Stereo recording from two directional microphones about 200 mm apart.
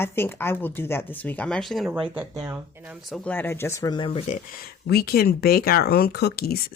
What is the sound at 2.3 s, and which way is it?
Speech, 15° right (ahead or behind).